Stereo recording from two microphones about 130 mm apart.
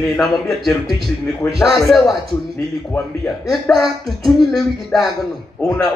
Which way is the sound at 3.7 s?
15° left (ahead or behind).